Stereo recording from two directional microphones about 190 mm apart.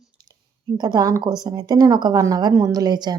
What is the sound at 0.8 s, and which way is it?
Speech, 20° right (ahead or behind).